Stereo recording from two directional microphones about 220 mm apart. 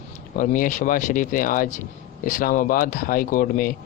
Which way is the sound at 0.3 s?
35° left (ahead or behind).